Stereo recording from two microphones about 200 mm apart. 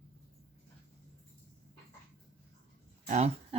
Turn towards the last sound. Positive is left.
turn(degrees=-35)  # may be behind; listen again after turning